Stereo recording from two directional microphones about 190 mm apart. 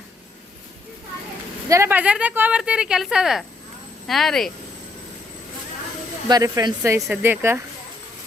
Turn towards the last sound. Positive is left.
turn(degrees=-10)  # may be behind; listen again after turning